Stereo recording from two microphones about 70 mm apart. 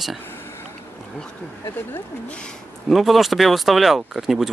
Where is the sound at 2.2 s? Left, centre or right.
Centre.